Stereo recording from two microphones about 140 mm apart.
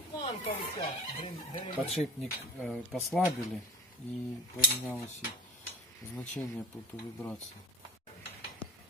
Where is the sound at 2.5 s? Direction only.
10° left (ahead or behind).